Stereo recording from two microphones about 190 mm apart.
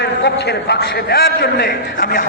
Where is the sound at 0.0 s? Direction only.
60° left (ahead or behind).